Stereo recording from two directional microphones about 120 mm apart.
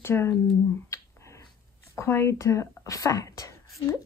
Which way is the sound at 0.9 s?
25° left (ahead or behind).